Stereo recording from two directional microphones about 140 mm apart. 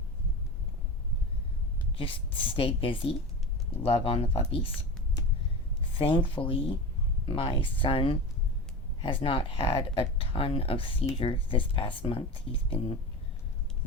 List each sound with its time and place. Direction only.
2.0 s speech: 40° left (ahead or behind)